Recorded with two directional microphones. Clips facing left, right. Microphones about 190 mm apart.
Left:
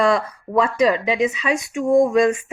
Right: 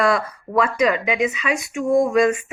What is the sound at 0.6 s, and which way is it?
Speech, 30° left (ahead or behind).